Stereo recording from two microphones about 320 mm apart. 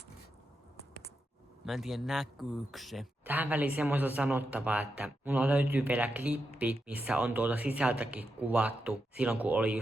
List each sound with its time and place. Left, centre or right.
1.6 s speech: centre